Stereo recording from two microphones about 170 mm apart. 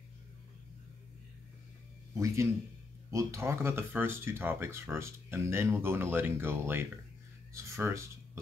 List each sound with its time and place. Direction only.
2.1 s speech: 15° right (ahead or behind)